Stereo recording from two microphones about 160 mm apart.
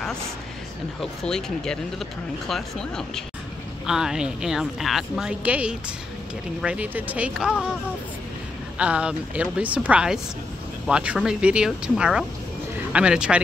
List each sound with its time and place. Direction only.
1.2 s a woman's voice: 5° left (ahead or behind)
8.7 s a woman's voice: 5° right (ahead or behind)